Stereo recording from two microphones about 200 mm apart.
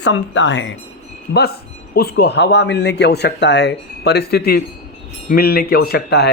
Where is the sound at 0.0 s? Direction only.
65° left (ahead or behind).